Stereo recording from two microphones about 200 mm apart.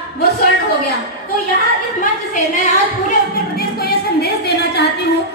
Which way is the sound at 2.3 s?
40° left (ahead or behind).